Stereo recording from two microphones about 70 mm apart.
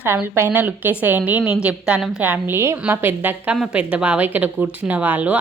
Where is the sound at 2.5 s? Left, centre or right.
Right.